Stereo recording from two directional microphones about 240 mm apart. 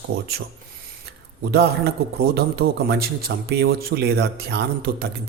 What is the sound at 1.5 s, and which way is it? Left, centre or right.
A man's voice, right.